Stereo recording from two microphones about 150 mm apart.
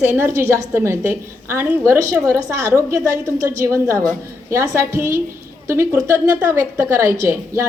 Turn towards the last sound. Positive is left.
turn(degrees=-20)  # may be behind; listen again after turning